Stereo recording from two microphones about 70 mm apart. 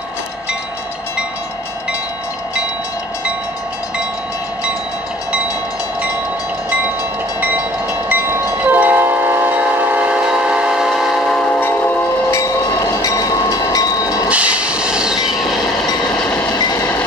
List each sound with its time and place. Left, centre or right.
8.1 s train: right; by 11.4 s centre
13.0 s train: left
14.3 s train: centre